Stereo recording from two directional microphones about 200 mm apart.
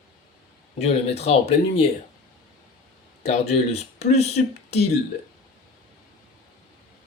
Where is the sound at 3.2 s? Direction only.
35° left (ahead or behind).